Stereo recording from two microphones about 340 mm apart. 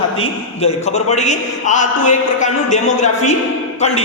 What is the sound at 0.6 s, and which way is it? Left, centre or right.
A man's voice, centre.